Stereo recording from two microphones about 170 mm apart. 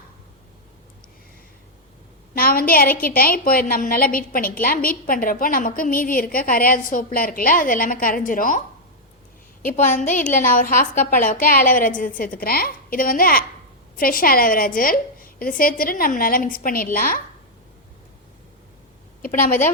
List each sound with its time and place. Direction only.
2.3 s a woman's voice: 55° left (ahead or behind)
9.6 s a woman's voice: 45° left (ahead or behind)
19.2 s a woman's voice: 50° left (ahead or behind)